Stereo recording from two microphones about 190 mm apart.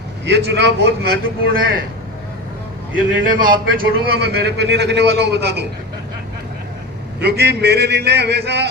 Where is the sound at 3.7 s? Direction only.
55° right (ahead or behind).